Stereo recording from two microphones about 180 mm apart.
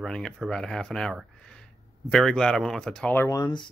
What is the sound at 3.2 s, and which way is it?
Speech, 20° left (ahead or behind).